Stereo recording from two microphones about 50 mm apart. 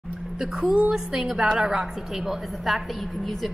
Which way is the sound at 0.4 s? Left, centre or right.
Centre.